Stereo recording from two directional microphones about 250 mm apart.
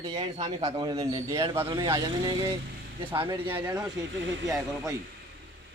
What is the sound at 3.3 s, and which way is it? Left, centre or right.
Speech, centre.